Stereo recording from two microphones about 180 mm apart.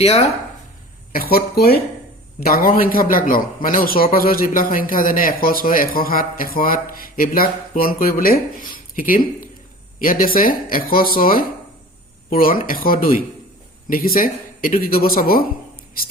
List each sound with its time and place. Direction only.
0.0 s speech: 35° left (ahead or behind)
1.1 s a man's voice: 55° left (ahead or behind)